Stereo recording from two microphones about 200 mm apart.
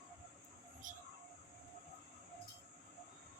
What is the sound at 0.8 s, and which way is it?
Train, 40° right (ahead or behind).